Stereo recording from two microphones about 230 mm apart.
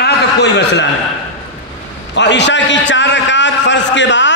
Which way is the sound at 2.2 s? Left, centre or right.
Left.